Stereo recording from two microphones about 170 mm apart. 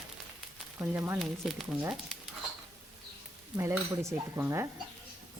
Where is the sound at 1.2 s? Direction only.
Centre (ahead or behind).